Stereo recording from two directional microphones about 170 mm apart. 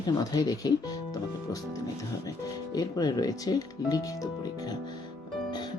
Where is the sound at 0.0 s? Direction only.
20° left (ahead or behind).